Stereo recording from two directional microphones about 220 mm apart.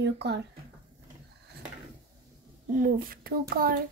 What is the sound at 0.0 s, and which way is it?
Speech, 50° right (ahead or behind).